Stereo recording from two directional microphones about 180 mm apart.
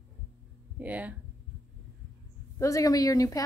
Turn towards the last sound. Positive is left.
turn(degrees=20)  # may be behind; listen again after turning